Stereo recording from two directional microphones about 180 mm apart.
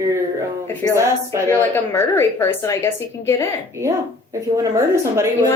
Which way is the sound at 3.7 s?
15° right (ahead or behind).